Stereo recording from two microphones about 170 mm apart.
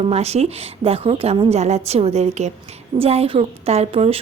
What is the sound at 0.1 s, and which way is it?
A woman's voice, 40° right (ahead or behind).